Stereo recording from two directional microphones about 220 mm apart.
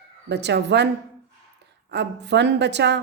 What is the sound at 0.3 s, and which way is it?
Speech, 50° right (ahead or behind).